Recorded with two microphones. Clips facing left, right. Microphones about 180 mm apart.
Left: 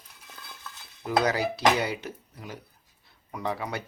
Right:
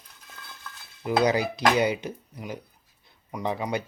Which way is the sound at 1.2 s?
15° right (ahead or behind).